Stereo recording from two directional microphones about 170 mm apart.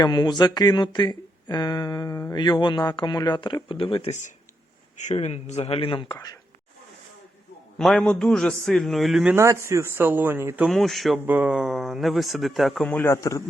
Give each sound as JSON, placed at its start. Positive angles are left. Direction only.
{"t": 0.0, "sound": "speech", "side_deg": 25}
{"t": 4.9, "sound": "speech", "side_deg": 40}
{"t": 7.8, "sound": "speech", "side_deg": 5}
{"t": 9.3, "sound": "speech", "side_deg": -15}
{"t": 10.7, "sound": "speech", "side_deg": 0}